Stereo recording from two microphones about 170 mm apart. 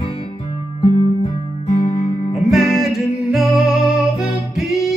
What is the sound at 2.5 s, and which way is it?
Music, centre (ahead or behind).